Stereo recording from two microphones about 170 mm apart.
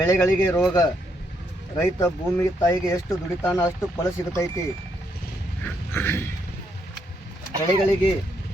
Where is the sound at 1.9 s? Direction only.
20° left (ahead or behind).